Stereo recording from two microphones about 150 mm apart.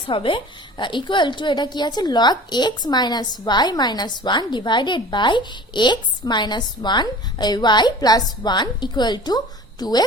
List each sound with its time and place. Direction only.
0.1 s a woman's voice: 35° left (ahead or behind)